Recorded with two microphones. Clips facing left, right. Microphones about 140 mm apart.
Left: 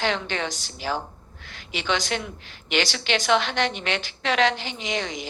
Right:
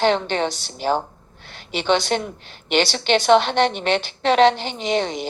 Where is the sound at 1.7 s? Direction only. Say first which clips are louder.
Right 7 dB; 30° right (ahead or behind).